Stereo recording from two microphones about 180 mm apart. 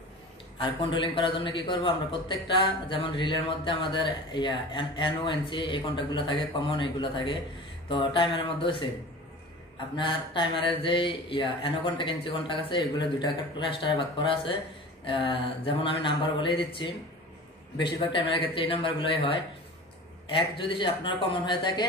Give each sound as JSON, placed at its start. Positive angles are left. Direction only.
{"t": 0.6, "sound": "a man's voice", "side_deg": 30}
{"t": 9.9, "sound": "a man's voice", "side_deg": 25}